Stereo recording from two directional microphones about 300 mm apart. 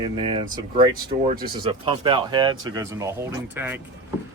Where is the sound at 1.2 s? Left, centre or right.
Right.